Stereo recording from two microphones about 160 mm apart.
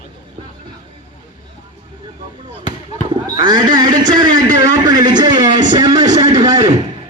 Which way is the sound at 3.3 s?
25° right (ahead or behind).